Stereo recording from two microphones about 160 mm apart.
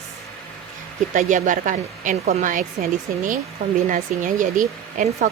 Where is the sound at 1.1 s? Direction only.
50° right (ahead or behind).